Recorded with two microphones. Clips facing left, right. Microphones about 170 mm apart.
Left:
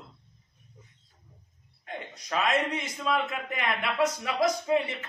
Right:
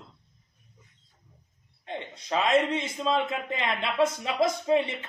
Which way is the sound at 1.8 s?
25° right (ahead or behind).